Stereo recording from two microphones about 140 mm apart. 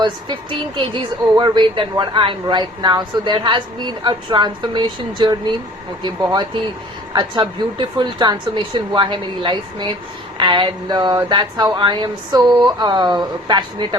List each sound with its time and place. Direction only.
0.0 s a woman's voice: 35° right (ahead or behind)